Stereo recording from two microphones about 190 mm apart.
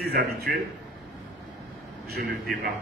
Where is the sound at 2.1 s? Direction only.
55° right (ahead or behind).